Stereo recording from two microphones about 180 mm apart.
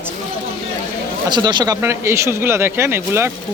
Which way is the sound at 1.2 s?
25° right (ahead or behind).